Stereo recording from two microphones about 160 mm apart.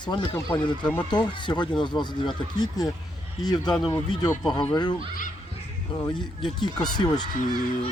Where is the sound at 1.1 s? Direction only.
30° left (ahead or behind).